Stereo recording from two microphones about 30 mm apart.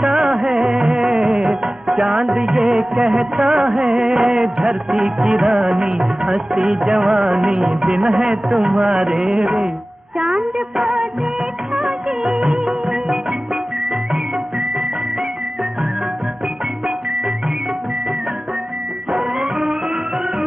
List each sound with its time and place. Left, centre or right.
0.0 s music: centre
0.5 s music: right
3.0 s music of bollywood: right
3.4 s music: right
4.3 s music: centre
8.6 s music: centre
10.8 s music: right
11.7 s music of bollywood: right